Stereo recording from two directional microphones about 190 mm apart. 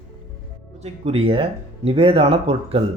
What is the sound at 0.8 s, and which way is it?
Speech, 30° right (ahead or behind).